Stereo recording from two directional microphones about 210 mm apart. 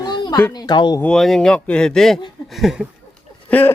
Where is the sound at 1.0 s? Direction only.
Centre (ahead or behind).